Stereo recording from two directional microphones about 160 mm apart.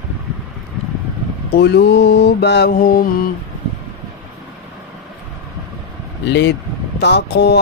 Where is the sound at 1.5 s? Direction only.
90° left; by 3.3 s 60° left (ahead or behind).